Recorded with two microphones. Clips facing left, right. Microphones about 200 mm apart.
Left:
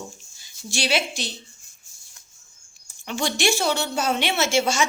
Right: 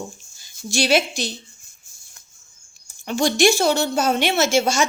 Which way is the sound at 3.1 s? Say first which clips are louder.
Right 6 dB; 40° right (ahead or behind).